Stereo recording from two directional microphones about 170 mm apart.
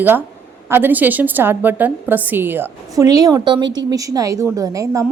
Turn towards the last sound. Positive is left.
turn(degrees=-20)  # may be behind; listen again after turning